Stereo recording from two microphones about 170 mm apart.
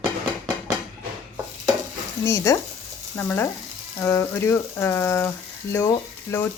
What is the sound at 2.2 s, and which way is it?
Speech, 15° left (ahead or behind).